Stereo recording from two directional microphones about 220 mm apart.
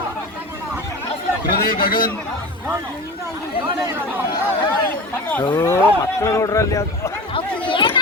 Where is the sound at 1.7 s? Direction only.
40° left (ahead or behind).